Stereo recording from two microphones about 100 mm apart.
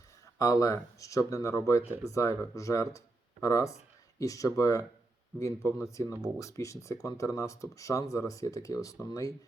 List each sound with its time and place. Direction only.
0.3 s speech: 35° left (ahead or behind)